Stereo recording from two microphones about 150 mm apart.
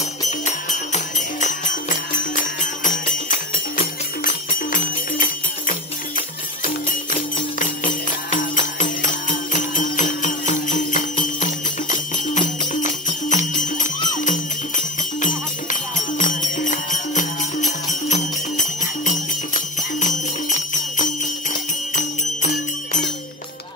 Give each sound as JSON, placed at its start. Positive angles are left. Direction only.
{"t": 0.5, "sound": "music", "side_deg": 50}